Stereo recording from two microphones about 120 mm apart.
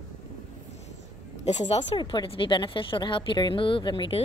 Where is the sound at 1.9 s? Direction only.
40° left (ahead or behind).